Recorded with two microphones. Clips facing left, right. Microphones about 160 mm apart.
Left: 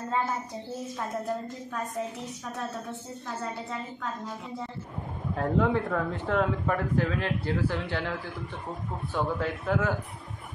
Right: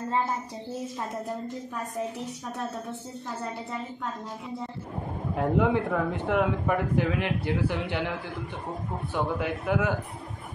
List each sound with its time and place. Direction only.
5.3 s a man's voice: 15° right (ahead or behind)